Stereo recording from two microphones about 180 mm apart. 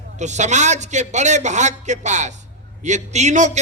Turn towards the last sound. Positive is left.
turn(degrees=-40)  # may be behind; listen again after turning